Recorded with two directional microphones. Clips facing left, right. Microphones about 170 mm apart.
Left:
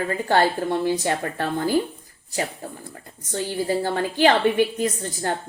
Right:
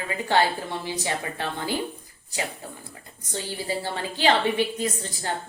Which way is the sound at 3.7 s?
50° left (ahead or behind).